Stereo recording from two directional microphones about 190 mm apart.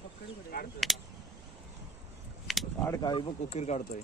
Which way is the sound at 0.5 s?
55° left (ahead or behind).